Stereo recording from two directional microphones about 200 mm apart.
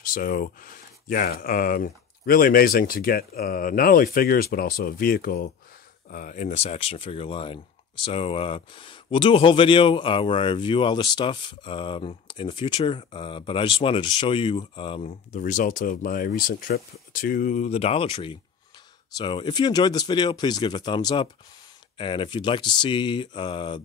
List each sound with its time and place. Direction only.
0.0 s speech: 45° left (ahead or behind); by 23.8 s 25° left (ahead or behind)